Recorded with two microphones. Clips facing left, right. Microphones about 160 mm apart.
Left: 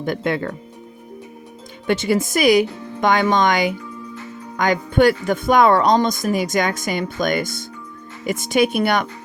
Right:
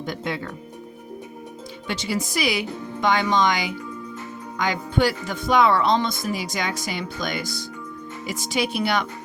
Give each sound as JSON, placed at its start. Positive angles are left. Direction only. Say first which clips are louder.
{"t": 0.0, "sound": "speech", "louder": "left 7 dB", "side_deg": 55}
{"t": 1.9, "sound": "speech", "louder": "left 8 dB", "side_deg": 50}